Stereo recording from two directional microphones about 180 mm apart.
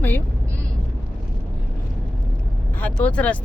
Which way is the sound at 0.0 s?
10° left (ahead or behind).